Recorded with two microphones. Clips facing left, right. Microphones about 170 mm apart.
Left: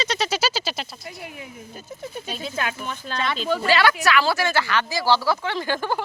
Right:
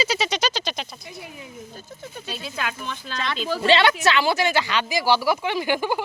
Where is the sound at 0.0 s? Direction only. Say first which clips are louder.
Even; 5° right (ahead or behind).